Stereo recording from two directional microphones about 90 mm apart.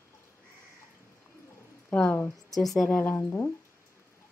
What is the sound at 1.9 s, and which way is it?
Speech, 15° left (ahead or behind).